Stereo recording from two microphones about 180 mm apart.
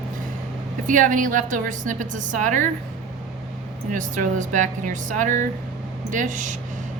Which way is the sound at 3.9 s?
45° right (ahead or behind).